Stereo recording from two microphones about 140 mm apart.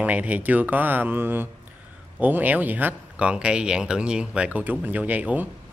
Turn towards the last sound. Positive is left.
turn(degrees=-10)  # may be behind; listen again after turning